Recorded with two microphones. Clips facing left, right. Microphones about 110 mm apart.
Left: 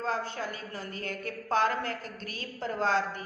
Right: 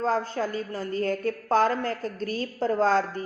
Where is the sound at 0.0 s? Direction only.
35° right (ahead or behind).